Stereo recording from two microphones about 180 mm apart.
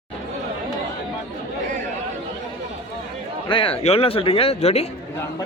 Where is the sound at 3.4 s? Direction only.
30° left (ahead or behind).